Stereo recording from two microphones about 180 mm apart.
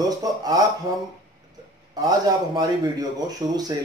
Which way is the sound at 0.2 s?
20° right (ahead or behind).